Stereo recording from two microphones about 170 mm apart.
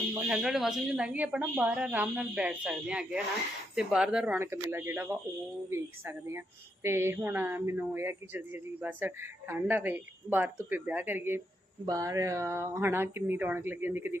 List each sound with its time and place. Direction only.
0.1 s speech: 5° right (ahead or behind)